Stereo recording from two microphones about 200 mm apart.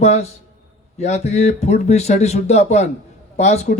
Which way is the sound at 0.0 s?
35° left (ahead or behind).